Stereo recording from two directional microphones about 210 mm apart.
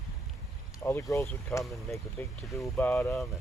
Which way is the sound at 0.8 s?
10° left (ahead or behind).